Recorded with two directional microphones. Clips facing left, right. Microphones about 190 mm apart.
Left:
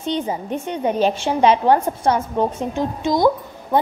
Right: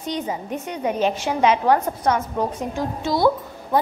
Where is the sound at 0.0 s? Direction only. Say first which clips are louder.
Left 3 dB; 30° left (ahead or behind).